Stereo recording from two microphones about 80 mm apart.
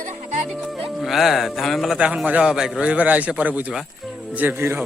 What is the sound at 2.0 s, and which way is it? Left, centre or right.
A man's voice, centre.